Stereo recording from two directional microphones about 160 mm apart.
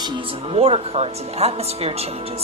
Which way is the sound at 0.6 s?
40° right (ahead or behind).